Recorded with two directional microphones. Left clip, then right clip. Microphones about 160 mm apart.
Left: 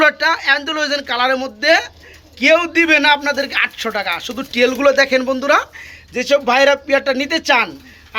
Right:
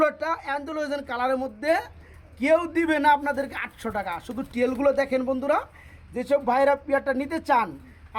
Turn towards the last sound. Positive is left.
turn(degrees=-20)  # may be behind; listen again after turning